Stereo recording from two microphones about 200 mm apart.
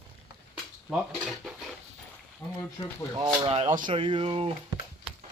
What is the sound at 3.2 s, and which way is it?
Speech, 25° right (ahead or behind).